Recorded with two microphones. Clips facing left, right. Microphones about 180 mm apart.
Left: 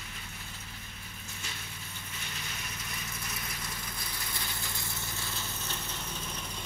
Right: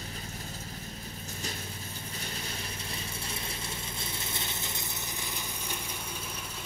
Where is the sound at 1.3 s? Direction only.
40° right (ahead or behind).